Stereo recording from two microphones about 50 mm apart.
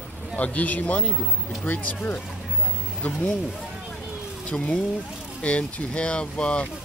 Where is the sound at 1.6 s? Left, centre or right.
Left.